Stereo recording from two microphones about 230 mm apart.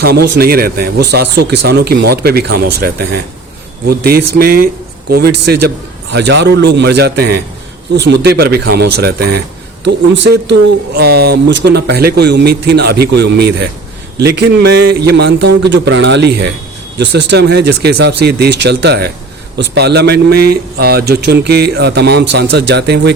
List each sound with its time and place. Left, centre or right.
0.0 s a man's voice: right